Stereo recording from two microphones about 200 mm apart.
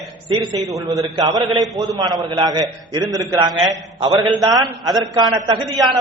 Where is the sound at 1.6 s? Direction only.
Centre (ahead or behind).